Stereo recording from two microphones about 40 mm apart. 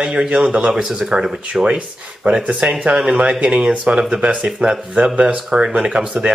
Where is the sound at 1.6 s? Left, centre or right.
Right.